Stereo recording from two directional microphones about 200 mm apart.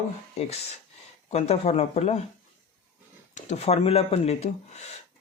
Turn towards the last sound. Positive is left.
turn(degrees=35)  # may be behind; listen again after turning